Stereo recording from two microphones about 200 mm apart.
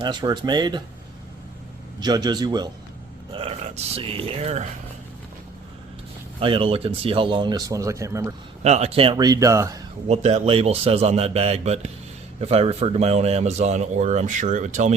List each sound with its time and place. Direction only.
0.0 s speech: 20° right (ahead or behind)
2.0 s speech: 20° right (ahead or behind)
6.4 s speech: 25° right (ahead or behind)
8.6 s speech: 35° right (ahead or behind); by 9.8 s 15° right (ahead or behind)
10.1 s a man's voice: 30° right (ahead or behind)